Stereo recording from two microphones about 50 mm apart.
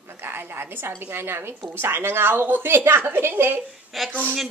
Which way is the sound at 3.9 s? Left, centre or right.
Centre.